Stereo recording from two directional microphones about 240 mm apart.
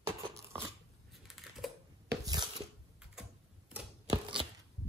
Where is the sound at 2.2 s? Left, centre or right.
Centre.